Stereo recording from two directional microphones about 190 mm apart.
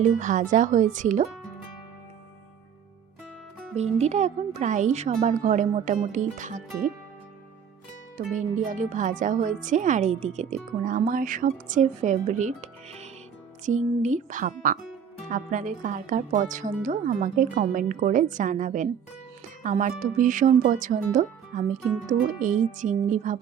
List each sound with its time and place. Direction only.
0.0 s speech: 40° right (ahead or behind)
3.8 s speech: 35° right (ahead or behind)
8.4 s speech: 40° right (ahead or behind)